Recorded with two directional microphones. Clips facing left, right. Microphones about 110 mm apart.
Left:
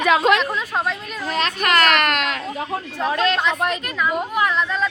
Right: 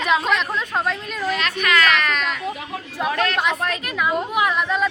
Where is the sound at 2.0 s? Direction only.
80° left.